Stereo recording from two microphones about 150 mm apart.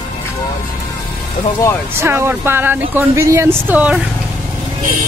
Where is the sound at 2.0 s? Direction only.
15° right (ahead or behind).